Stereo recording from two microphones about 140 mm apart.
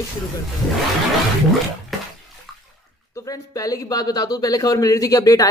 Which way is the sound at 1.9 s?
Centre (ahead or behind).